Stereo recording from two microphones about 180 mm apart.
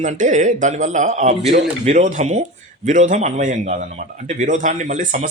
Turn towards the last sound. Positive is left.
turn(degrees=-40)  # may be behind; listen again after turning